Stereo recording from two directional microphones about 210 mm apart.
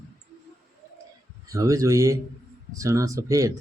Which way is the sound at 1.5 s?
15° right (ahead or behind).